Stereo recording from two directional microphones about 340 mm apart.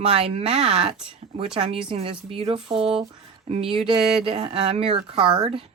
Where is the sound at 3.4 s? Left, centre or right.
Centre.